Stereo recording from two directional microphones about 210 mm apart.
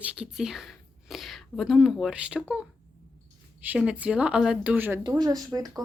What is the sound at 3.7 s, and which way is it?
Speech, 5° right (ahead or behind).